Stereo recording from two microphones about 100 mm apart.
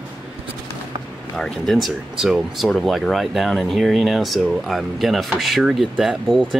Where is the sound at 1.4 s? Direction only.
Centre (ahead or behind).